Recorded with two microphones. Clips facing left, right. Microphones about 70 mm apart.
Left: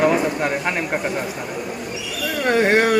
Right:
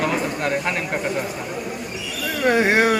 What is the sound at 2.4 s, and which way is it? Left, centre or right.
Speech, centre.